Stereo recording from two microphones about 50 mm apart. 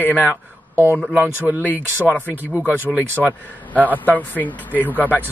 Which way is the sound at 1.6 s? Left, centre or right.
Left.